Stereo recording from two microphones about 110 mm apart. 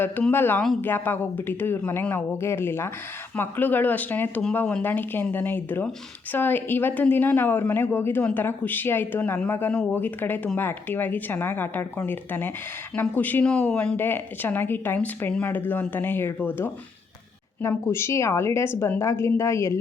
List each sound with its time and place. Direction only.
0.0 s speech: 20° left (ahead or behind)